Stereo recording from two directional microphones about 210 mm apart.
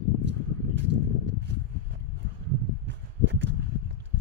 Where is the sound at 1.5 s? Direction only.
55° right (ahead or behind).